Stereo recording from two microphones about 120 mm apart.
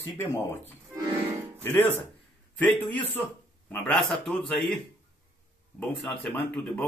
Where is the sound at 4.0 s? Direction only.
5° left (ahead or behind).